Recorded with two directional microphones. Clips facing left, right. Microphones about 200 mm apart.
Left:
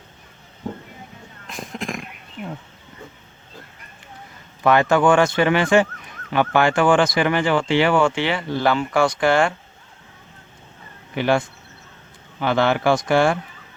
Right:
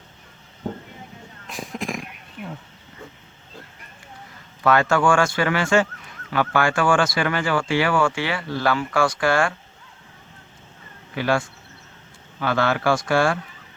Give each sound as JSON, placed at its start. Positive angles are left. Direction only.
{"t": 1.5, "sound": "a sound", "side_deg": 0}
{"t": 4.6, "sound": "speech", "side_deg": 20}
{"t": 11.1, "sound": "speech", "side_deg": 20}